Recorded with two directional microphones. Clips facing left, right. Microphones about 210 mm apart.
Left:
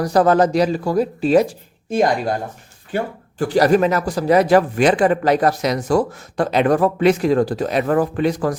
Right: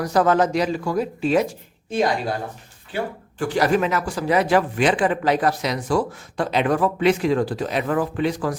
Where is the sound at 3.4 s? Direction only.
40° left (ahead or behind).